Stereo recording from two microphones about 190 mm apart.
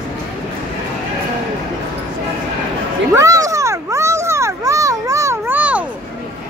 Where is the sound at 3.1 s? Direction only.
15° right (ahead or behind).